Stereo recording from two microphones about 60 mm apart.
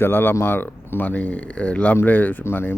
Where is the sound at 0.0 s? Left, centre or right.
Left.